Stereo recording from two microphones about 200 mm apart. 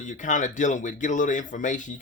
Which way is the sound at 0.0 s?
40° left (ahead or behind).